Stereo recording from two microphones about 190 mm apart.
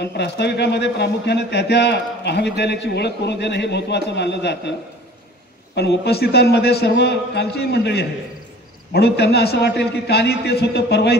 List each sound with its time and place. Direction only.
0.0 s speech: 60° left (ahead or behind)
5.8 s speech: 60° left (ahead or behind)